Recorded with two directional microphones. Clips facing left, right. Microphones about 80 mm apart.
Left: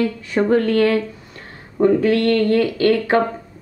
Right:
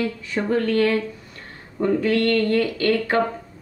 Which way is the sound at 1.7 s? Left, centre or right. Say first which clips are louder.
Left 5 dB; left.